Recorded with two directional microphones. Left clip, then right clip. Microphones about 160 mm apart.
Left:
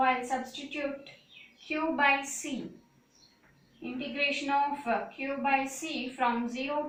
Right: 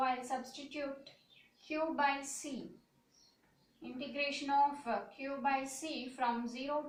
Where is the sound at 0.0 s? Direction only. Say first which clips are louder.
Left 8 dB; 25° right (ahead or behind).